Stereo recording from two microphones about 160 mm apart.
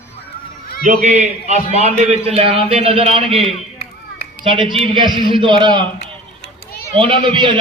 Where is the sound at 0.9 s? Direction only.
45° right (ahead or behind).